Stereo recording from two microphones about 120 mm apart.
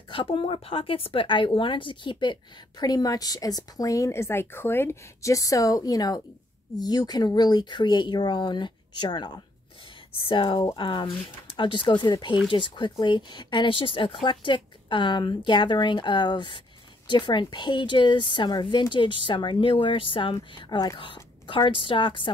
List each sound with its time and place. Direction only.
0.1 s a woman's voice: 45° left (ahead or behind)